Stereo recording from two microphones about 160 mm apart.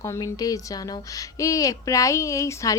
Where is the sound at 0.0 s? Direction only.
20° left (ahead or behind).